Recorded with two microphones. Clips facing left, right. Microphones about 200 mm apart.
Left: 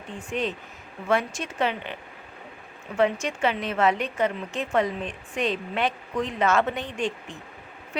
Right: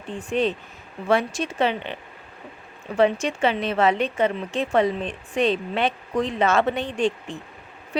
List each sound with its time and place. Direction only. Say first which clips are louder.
0.3 s speech: right 6 dB; 30° right (ahead or behind)
3.0 s speech: right 3 dB; 30° right (ahead or behind)